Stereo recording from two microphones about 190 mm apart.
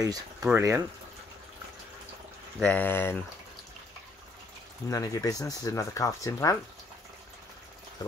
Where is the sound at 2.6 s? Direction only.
10° left (ahead or behind).